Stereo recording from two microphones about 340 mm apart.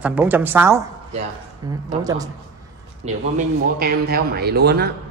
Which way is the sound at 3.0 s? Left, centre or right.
Right.